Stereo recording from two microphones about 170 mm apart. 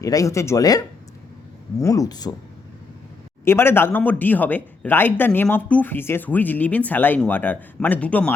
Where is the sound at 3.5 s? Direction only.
15° left (ahead or behind).